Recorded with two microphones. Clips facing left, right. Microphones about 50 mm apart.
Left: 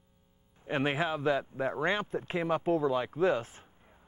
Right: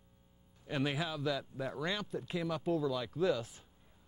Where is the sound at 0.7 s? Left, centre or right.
Left.